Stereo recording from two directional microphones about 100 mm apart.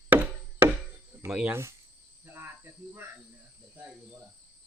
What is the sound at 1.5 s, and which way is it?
Speech, 30° right (ahead or behind).